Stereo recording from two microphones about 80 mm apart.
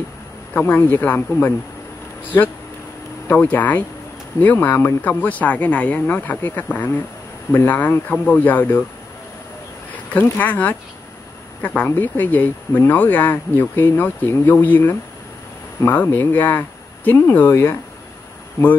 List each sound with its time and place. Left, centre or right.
0.7 s speech: left
3.3 s speech: left
10.1 s speech: left